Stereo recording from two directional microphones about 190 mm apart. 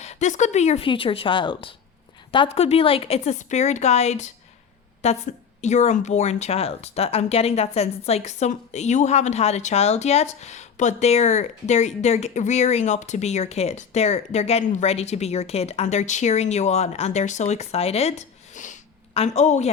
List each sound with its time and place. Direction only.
0.0 s speech: 35° left (ahead or behind)